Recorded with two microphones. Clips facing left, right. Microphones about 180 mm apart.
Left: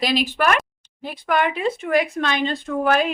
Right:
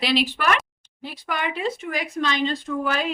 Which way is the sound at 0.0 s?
45° left (ahead or behind).